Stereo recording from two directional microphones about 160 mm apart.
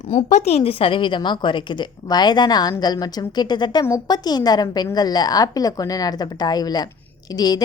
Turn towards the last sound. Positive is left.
turn(degrees=25)  # may be behind; listen again after turning